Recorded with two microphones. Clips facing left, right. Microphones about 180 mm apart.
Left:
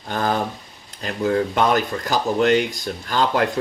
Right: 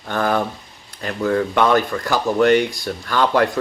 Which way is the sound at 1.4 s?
25° left (ahead or behind).